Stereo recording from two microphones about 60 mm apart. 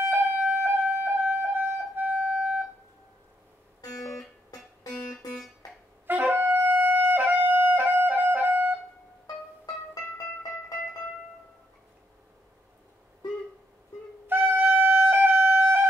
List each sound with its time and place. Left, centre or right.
0.0 s music: right
6.0 s wind instrument: right
14.2 s music: right